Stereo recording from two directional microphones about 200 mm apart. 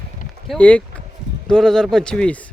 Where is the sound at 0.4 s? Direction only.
5° left (ahead or behind).